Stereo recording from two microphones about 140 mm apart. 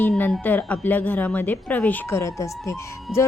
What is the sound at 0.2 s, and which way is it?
A woman's voice, 10° left (ahead or behind).